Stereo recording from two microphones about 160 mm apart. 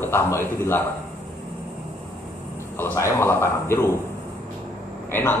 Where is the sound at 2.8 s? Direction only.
15° left (ahead or behind).